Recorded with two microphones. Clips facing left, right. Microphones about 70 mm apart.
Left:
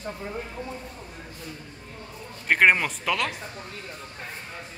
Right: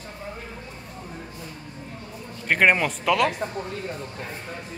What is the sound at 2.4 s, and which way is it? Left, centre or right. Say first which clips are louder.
Speech: even; centre.